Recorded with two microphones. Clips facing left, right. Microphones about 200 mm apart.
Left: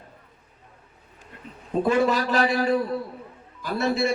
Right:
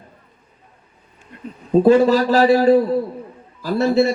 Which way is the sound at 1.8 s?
35° right (ahead or behind).